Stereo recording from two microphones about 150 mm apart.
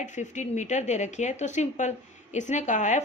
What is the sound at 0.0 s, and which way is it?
A woman's voice, 55° left (ahead or behind).